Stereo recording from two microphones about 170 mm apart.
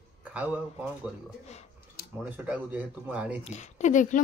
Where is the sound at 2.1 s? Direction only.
10° right (ahead or behind).